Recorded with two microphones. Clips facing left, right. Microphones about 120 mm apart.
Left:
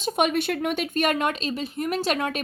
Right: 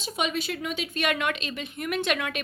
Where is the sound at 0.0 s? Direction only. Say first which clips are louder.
Left 6 dB; 55° left (ahead or behind).